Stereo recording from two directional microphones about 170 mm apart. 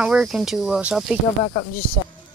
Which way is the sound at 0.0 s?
5° right (ahead or behind).